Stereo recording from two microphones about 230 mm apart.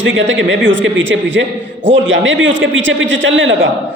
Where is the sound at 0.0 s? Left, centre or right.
Right.